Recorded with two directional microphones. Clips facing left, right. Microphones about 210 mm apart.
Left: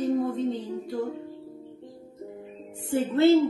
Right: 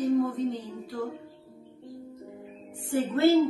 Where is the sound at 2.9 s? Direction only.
25° left (ahead or behind).